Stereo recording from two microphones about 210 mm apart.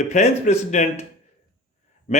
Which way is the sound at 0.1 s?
35° left (ahead or behind).